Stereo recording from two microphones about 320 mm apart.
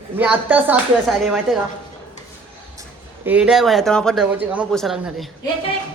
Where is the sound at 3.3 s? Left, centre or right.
Centre.